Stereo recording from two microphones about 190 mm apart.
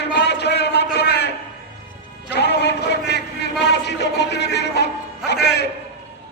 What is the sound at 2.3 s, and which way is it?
Music, 60° left (ahead or behind).